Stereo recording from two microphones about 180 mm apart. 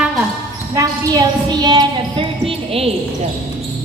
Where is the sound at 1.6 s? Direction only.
25° right (ahead or behind).